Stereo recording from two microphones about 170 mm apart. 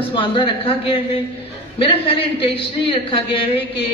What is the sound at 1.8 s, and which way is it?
A man's voice, 30° left (ahead or behind).